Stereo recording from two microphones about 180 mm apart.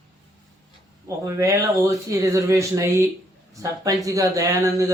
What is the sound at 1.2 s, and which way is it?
Speech, 15° right (ahead or behind).